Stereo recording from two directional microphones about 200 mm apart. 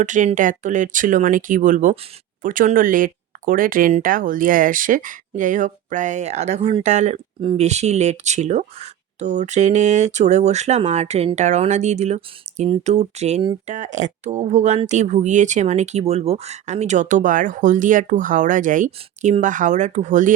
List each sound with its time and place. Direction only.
0.0 s speech: 40° right (ahead or behind)